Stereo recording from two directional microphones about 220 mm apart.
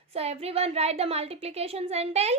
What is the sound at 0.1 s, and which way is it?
A woman's voice, 25° right (ahead or behind).